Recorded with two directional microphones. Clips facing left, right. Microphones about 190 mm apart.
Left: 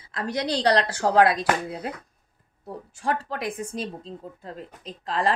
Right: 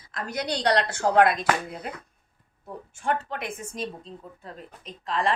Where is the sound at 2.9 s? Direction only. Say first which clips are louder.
Even; 35° left (ahead or behind).